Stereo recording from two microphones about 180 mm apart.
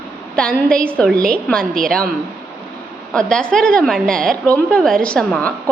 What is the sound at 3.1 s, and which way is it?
A woman's voice, 5° left (ahead or behind).